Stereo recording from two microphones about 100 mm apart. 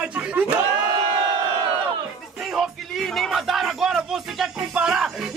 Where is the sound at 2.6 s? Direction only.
Centre (ahead or behind).